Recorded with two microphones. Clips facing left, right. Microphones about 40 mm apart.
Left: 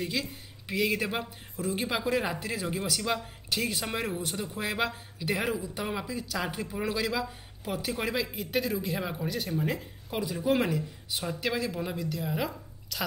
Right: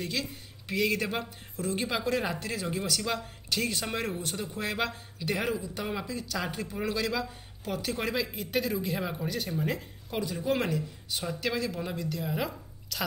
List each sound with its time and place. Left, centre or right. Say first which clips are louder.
0.0 s a man's voice: left 1 dB; centre